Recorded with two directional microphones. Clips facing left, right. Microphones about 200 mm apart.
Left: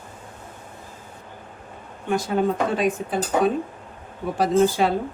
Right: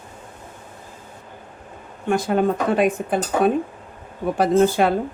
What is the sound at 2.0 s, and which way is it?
A woman's voice, 55° right (ahead or behind).